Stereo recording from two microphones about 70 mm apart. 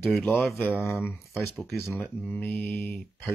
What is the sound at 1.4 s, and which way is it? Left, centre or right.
Speech, centre.